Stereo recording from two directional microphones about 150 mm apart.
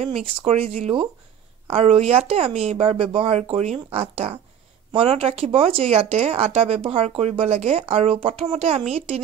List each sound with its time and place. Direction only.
0.0 s speech: 40° right (ahead or behind)